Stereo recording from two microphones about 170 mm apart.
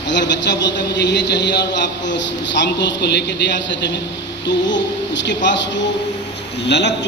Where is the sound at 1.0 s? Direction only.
90° left.